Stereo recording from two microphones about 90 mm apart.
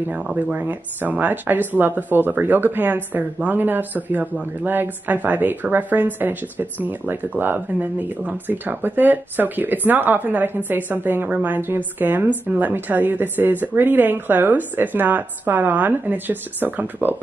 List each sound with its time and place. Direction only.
0.1 s speech: 15° right (ahead or behind)